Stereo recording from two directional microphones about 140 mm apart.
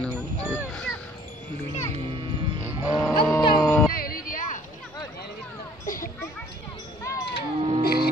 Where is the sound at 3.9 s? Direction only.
90° left; by 4.5 s 75° left (ahead or behind).